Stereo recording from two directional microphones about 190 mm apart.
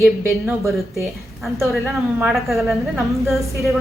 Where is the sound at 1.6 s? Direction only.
Centre (ahead or behind).